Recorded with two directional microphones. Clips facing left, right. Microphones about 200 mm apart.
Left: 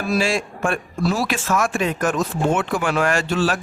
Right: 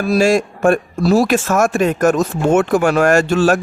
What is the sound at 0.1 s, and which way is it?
A man's voice, 45° right (ahead or behind).